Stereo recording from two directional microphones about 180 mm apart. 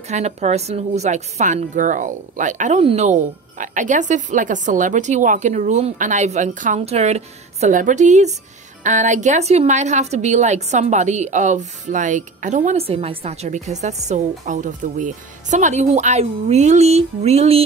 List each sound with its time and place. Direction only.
0.1 s a woman's voice: 40° right (ahead or behind)